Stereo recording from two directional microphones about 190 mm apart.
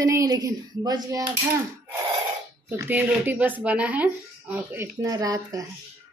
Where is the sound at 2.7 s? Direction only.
10° right (ahead or behind).